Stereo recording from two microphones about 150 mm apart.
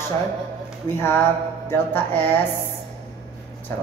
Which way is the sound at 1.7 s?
15° left (ahead or behind).